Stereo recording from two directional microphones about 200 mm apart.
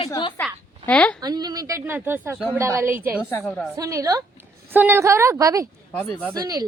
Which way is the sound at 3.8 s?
15° right (ahead or behind).